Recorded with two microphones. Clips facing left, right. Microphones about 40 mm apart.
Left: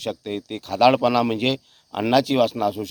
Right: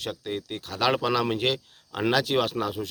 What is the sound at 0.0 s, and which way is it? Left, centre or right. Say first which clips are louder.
Speech: left 4 dB; centre.